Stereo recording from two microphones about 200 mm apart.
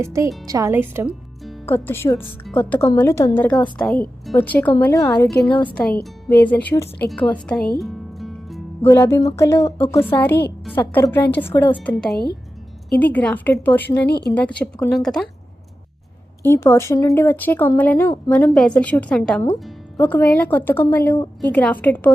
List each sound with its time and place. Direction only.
0.0 s speech: 15° right (ahead or behind)
1.6 s a woman's voice: 10° left (ahead or behind)
7.8 s music: centre (ahead or behind)
8.9 s speech: 10° left (ahead or behind)
9.6 s a woman's voice: 30° left (ahead or behind)
9.9 s a woman's voice: 10° left (ahead or behind)
12.1 s speech: 55° left (ahead or behind)
13.0 s speech: 10° left (ahead or behind)
14.1 s a woman's voice: 55° left (ahead or behind)
14.6 s a woman's voice: 5° left (ahead or behind)
16.4 s speech: 10° left (ahead or behind)